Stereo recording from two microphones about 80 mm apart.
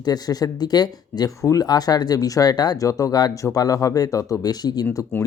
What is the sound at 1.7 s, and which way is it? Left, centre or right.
Speech, left.